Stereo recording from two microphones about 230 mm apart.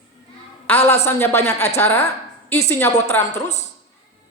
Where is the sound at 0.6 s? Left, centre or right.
Centre.